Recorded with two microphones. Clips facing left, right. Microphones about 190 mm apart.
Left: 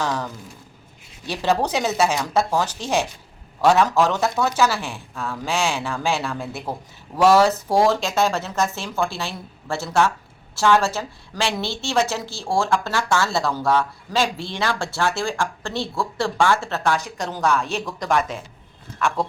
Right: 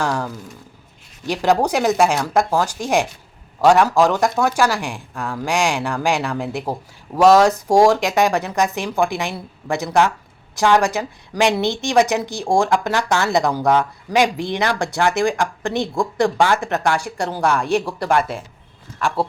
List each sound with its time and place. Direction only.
0.0 s a woman's voice: 10° right (ahead or behind)
1.3 s a woman's voice: 10° right (ahead or behind)